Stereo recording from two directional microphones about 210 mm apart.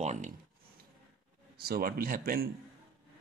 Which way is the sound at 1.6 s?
45° right (ahead or behind).